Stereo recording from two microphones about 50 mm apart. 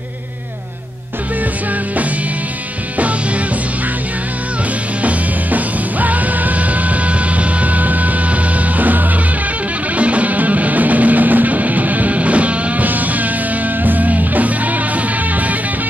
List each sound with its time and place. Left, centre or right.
3.0 s music: right
5.0 s music: right